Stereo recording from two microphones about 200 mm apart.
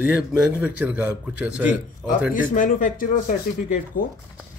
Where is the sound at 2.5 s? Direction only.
40° left (ahead or behind).